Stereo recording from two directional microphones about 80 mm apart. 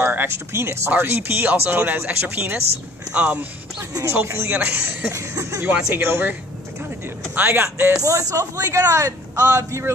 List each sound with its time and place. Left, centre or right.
0.0 s speech: right
5.1 s a man's voice: right
7.3 s speech: right
8.0 s a man's voice: right